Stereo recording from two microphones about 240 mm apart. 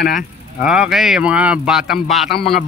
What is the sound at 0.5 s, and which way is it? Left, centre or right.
Speech, centre.